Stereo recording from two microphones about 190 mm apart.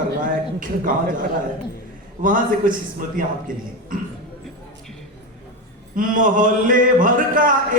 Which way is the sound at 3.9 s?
45° right (ahead or behind).